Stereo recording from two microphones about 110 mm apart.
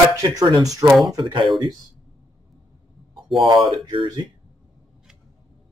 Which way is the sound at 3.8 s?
45° right (ahead or behind).